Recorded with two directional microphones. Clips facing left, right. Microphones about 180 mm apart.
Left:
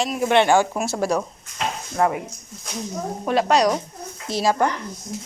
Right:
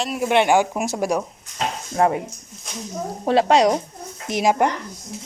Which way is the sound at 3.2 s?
25° right (ahead or behind).